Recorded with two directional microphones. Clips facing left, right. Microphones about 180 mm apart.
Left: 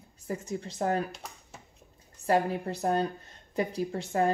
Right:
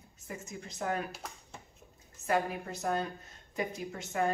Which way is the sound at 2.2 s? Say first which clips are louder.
Left 5 dB; 35° left (ahead or behind).